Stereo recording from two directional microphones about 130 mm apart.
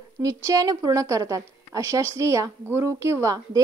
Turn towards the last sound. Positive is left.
turn(degrees=-25)  # may be behind; listen again after turning